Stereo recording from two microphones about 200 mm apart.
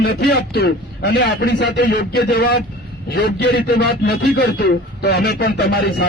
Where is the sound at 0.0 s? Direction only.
50° left (ahead or behind).